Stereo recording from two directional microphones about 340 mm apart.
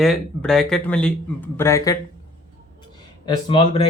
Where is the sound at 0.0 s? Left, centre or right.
Centre.